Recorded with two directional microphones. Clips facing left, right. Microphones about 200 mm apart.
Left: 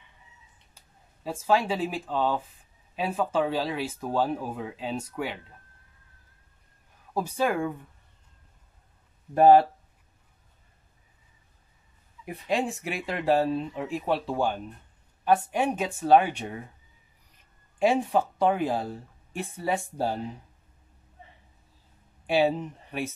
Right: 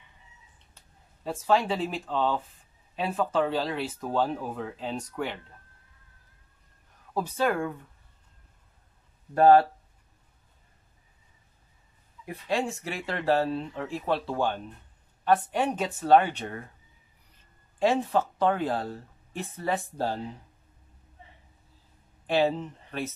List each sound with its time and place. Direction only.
1.2 s speech: 10° left (ahead or behind)
7.2 s speech: 10° left (ahead or behind)
9.3 s speech: 15° left (ahead or behind)
12.3 s speech: 15° left (ahead or behind)
17.7 s speech: 10° left (ahead or behind)
22.2 s speech: 10° left (ahead or behind)